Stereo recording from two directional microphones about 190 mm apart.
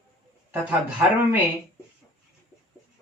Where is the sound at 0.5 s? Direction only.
10° right (ahead or behind).